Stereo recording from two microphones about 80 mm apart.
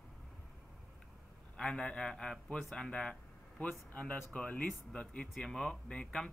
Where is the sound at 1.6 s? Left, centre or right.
Centre.